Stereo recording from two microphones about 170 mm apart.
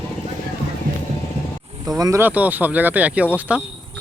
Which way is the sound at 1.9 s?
20° right (ahead or behind).